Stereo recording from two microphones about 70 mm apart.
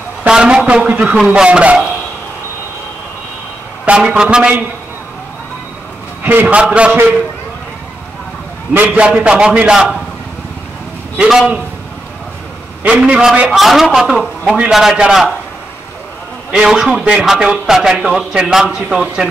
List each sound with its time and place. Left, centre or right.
0.3 s a man's voice: centre
3.8 s a man's voice: centre
6.4 s a man's voice: centre
8.7 s a man's voice: right
11.2 s a man's voice: centre
12.8 s a man's voice: centre
16.5 s a man's voice: centre